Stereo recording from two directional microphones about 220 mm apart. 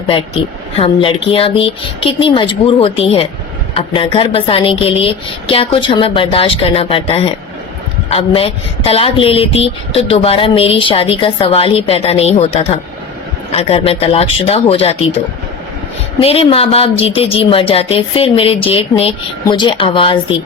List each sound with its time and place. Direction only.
0.8 s speech: 25° left (ahead or behind)
16.2 s speech: 25° left (ahead or behind)